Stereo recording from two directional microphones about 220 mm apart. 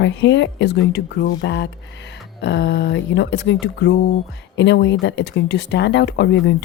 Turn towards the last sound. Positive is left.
turn(degrees=55)  # may be behind; listen again after turning